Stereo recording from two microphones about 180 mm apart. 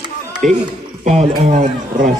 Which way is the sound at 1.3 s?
45° right (ahead or behind).